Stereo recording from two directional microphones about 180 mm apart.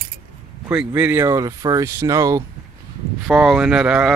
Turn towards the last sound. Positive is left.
turn(degrees=-5)  # may be behind; listen again after turning